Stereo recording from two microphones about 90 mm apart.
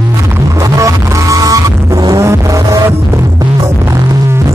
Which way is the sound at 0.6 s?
35° right (ahead or behind).